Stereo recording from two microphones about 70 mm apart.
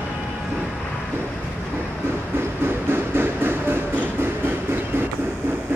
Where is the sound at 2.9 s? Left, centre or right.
Right.